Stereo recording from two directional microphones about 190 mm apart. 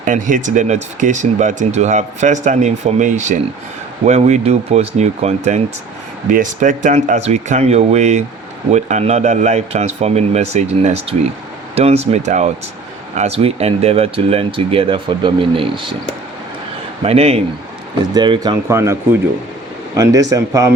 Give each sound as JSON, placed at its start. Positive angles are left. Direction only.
{"t": 0.0, "sound": "speech", "side_deg": -45}
{"t": 17.0, "sound": "a man's voice", "side_deg": -30}